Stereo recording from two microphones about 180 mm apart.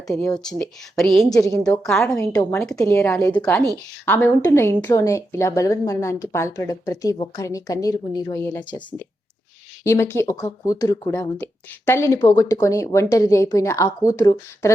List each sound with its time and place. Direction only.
0.4 s a woman's voice: centre (ahead or behind)
1.6 s a woman's voice: 20° left (ahead or behind)
1.9 s a woman's voice: 5° left (ahead or behind)
2.3 s a woman's voice: 15° left (ahead or behind)
9.8 s speech: 15° left (ahead or behind)